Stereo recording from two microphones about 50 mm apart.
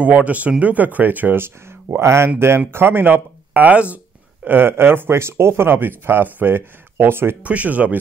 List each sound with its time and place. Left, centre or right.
0.0 s speech: right
1.4 s speech: right
4.5 s speech: right
7.4 s speech: right